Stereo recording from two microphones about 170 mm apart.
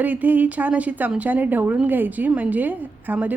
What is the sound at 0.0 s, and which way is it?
A woman's voice, 10° right (ahead or behind).